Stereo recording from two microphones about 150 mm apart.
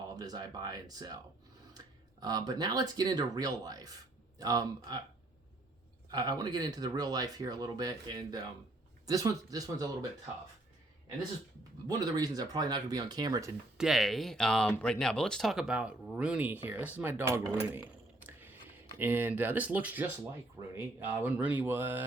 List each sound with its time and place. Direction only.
0.2 s speech: 25° right (ahead or behind)
6.1 s speech: 25° right (ahead or behind)
11.9 s speech: 25° right (ahead or behind)
13.7 s speech: centre (ahead or behind)